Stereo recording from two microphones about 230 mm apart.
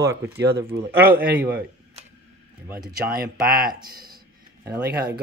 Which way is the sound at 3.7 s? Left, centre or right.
Centre.